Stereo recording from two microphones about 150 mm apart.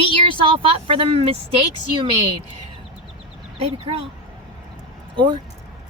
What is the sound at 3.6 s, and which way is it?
Speech, 40° right (ahead or behind).